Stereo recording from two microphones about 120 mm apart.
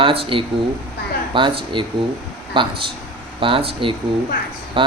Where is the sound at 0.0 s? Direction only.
45° right (ahead or behind).